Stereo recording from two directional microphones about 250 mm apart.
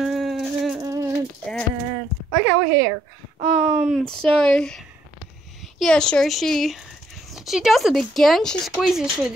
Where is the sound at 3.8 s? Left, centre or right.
Centre.